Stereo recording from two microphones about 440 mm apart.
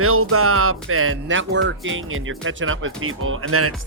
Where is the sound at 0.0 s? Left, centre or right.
Right.